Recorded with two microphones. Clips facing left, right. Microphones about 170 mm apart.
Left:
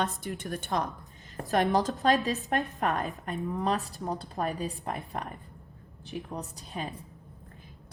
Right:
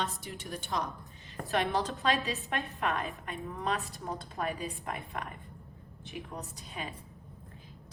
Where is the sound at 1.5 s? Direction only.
40° left (ahead or behind).